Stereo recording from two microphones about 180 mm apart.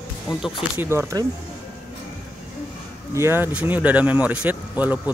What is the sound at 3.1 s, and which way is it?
Speech, 15° right (ahead or behind).